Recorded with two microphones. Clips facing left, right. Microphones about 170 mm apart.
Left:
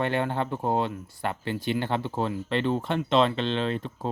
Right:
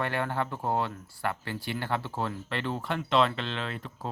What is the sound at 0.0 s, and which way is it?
Speech, 20° left (ahead or behind).